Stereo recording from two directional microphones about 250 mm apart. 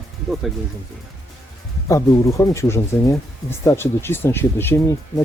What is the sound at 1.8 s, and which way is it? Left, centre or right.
Speech, centre.